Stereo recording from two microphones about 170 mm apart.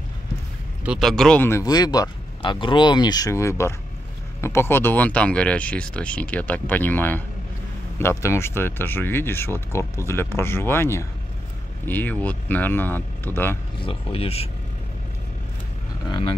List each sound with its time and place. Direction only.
0.8 s speech: centre (ahead or behind)
13.8 s speech: 35° left (ahead or behind)
16.1 s speech: 30° left (ahead or behind)